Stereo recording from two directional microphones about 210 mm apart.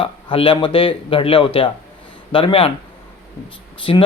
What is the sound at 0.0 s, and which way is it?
Speech, 25° left (ahead or behind).